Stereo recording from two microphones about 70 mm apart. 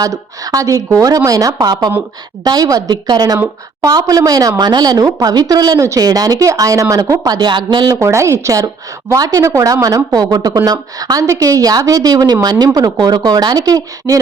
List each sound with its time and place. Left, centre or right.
0.0 s a woman's voice: right
1.6 s a woman's voice: right
7.3 s a woman's voice: right
7.9 s a woman's voice: right
8.6 s a woman's voice: right